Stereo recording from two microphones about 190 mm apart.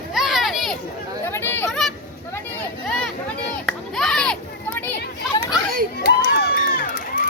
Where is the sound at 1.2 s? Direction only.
10° left (ahead or behind).